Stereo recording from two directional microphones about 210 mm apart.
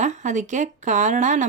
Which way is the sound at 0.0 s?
35° right (ahead or behind).